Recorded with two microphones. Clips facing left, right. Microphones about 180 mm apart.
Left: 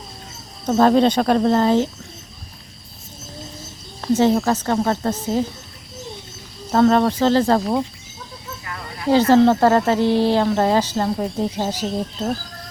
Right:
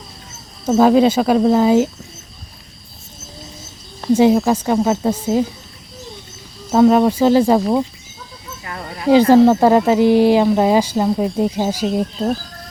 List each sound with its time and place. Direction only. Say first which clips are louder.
0.6 s speech: right 3 dB; 5° right (ahead or behind)
4.0 s speech: right 4 dB; 10° right (ahead or behind)
6.7 s speech: right 3 dB; 10° right (ahead or behind)
8.6 s snake: right 6 dB; 25° right (ahead or behind)
9.0 s speech: right 4 dB; 15° right (ahead or behind)